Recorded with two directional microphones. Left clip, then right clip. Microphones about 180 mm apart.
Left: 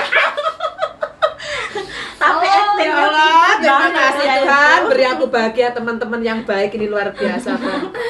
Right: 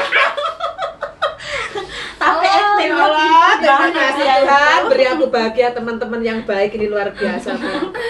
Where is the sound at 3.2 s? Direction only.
55° left (ahead or behind).